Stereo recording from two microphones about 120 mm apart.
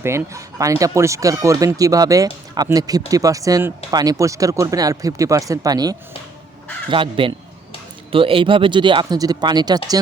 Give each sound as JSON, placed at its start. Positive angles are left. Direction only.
{"t": 0.0, "sound": "speech", "side_deg": -20}
{"t": 6.9, "sound": "speech", "side_deg": -45}